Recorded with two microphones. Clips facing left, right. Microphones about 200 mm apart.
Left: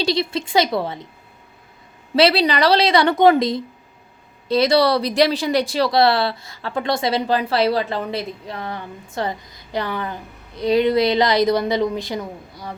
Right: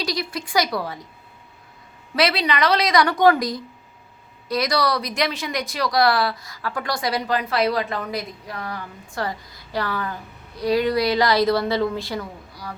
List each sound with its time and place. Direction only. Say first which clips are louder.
0.0 s speech: left 6 dB; 25° left (ahead or behind)
2.1 s speech: left 5 dB; 30° left (ahead or behind)